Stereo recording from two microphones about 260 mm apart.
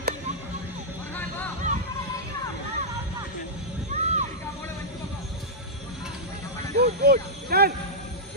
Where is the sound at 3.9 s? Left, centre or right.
Right.